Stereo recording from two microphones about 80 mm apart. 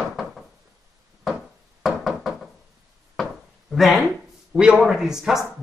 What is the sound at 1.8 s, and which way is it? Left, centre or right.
Knock, centre.